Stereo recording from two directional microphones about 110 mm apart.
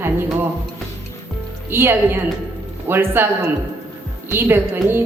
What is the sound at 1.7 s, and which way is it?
Speech, 20° right (ahead or behind).